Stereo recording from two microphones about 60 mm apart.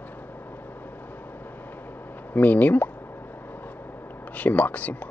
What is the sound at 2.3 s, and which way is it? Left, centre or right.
Speech, left.